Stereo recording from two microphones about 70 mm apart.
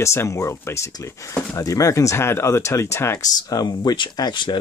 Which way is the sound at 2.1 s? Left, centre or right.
Left.